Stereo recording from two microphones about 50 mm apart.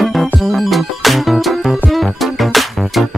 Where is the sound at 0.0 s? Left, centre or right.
Centre.